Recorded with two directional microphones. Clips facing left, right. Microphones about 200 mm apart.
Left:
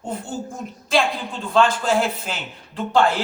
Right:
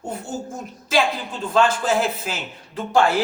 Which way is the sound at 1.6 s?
5° right (ahead or behind).